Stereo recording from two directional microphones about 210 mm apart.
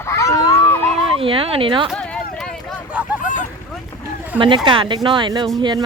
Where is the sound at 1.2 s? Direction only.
25° right (ahead or behind).